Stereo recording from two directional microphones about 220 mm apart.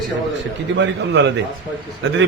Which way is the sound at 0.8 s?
55° right (ahead or behind).